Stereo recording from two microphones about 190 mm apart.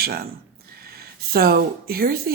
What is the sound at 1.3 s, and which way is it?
Speech, 55° right (ahead or behind).